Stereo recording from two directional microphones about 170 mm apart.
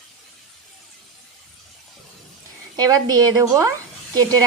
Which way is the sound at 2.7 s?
25° right (ahead or behind).